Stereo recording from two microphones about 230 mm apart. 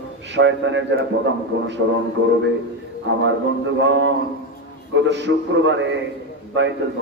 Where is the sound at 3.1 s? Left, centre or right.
Right.